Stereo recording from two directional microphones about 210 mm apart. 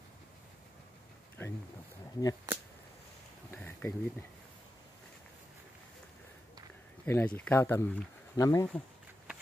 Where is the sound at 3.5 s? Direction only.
10° left (ahead or behind).